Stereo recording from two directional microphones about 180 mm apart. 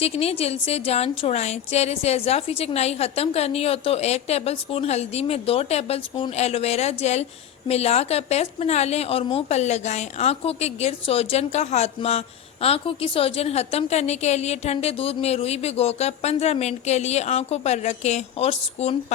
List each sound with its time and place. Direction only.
0.0 s a woman's voice: 35° left (ahead or behind)